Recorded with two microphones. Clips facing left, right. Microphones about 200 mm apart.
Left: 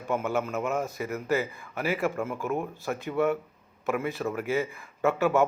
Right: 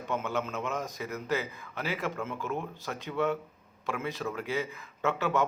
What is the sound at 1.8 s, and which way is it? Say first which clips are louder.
A man's voice: left 6 dB; 15° left (ahead or behind).